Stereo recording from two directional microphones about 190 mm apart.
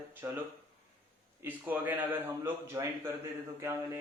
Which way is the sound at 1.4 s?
10° right (ahead or behind).